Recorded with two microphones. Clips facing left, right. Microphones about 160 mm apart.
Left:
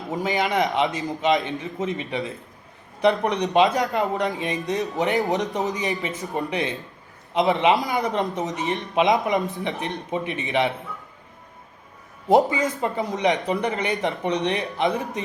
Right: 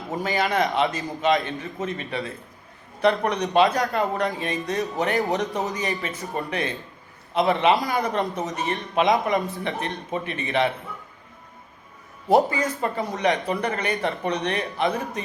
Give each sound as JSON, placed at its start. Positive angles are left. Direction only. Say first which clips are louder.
{"t": 0.1, "sound": "a man's voice", "louder": "left 1 dB", "side_deg": 20}
{"t": 12.3, "sound": "speech", "louder": "left 1 dB", "side_deg": 20}